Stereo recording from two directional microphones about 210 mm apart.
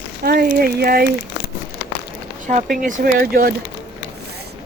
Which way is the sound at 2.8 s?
40° right (ahead or behind).